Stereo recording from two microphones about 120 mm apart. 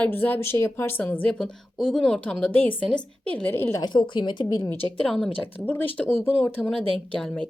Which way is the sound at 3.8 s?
40° left (ahead or behind).